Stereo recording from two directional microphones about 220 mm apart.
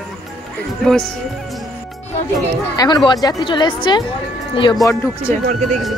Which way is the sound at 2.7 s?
20° left (ahead or behind).